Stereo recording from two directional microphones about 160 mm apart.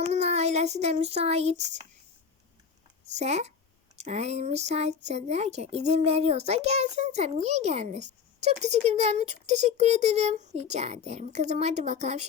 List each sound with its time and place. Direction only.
0.1 s speech: 45° right (ahead or behind)
3.2 s speech: 45° right (ahead or behind)